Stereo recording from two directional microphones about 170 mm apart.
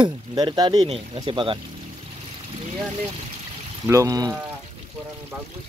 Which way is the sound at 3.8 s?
20° right (ahead or behind).